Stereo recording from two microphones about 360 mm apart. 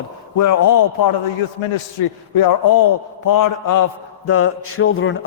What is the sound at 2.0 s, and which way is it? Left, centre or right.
Speech, left.